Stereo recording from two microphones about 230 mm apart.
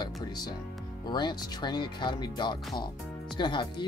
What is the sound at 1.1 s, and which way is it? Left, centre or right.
Speech, centre.